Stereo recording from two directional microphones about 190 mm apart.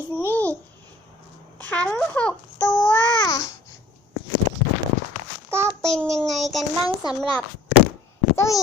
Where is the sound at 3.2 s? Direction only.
20° left (ahead or behind).